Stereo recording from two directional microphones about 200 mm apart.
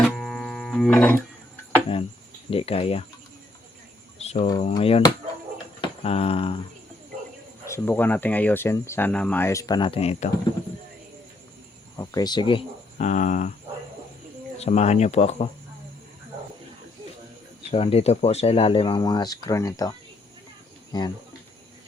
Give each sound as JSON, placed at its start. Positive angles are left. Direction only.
{"t": 0.0, "sound": "guitar", "side_deg": 0}
{"t": 2.5, "sound": "speech", "side_deg": 30}
{"t": 4.4, "sound": "speech", "side_deg": 20}
{"t": 7.7, "sound": "speech", "side_deg": 10}
{"t": 11.9, "sound": "speech", "side_deg": 20}
{"t": 13.0, "sound": "speech", "side_deg": 35}
{"t": 14.6, "sound": "speech", "side_deg": 35}
{"t": 17.7, "sound": "speech", "side_deg": 30}